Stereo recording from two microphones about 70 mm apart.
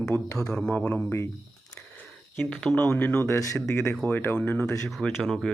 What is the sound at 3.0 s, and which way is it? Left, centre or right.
Speech, left.